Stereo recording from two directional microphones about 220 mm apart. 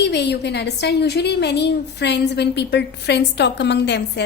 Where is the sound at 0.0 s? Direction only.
50° left (ahead or behind).